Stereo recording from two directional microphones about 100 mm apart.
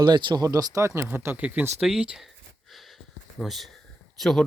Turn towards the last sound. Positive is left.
turn(degrees=0)  # may be behind; listen again after turning